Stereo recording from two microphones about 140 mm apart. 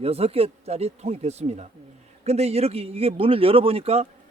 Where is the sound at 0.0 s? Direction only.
45° right (ahead or behind).